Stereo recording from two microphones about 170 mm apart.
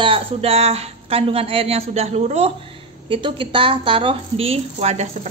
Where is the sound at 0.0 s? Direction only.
35° right (ahead or behind).